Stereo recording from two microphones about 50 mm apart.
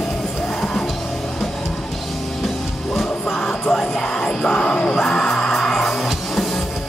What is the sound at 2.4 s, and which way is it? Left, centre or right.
Music, centre.